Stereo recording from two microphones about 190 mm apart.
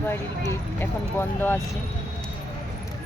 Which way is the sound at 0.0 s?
15° left (ahead or behind).